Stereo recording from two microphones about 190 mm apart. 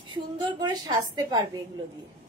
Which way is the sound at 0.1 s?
20° right (ahead or behind).